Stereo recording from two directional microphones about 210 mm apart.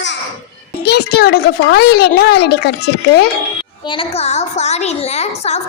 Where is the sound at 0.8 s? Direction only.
50° left (ahead or behind).